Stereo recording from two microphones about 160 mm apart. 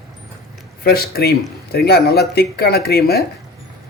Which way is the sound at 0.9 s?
75° left (ahead or behind).